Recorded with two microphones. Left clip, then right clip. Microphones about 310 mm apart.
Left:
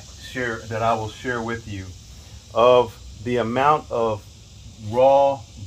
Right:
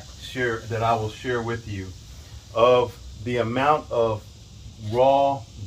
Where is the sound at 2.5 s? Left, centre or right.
Centre.